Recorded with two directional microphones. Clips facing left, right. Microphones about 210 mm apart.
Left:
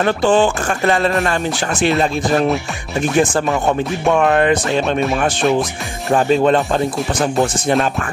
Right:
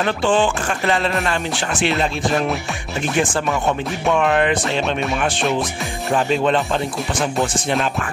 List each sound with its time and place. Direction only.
0.0 s speech: 40° left (ahead or behind)
1.2 s music: 40° left (ahead or behind)
4.1 s speech: 45° left (ahead or behind)
6.1 s speech: 45° left (ahead or behind)